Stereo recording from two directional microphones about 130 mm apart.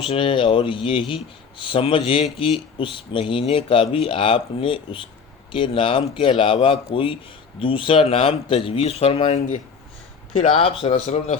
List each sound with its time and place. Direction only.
0.1 s speech: 40° left (ahead or behind)
10.6 s speech: 50° left (ahead or behind)
10.9 s a man's voice: 65° left (ahead or behind)